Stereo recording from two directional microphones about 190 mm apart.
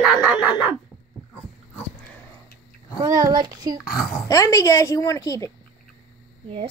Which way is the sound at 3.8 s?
50° left (ahead or behind).